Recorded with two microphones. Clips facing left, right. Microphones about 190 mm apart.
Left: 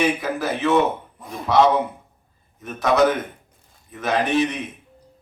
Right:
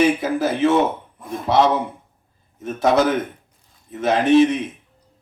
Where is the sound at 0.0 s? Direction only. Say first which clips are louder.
Right 4 dB; 25° right (ahead or behind).